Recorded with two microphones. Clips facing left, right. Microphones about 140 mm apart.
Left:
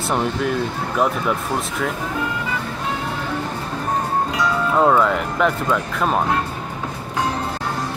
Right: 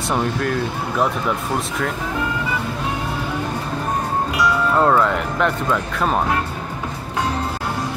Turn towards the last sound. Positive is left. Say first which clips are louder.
# even
turn(degrees=0)  # may be behind; listen again after turning